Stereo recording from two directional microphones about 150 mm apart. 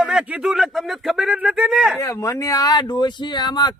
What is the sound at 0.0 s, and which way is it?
A man's voice, 5° right (ahead or behind).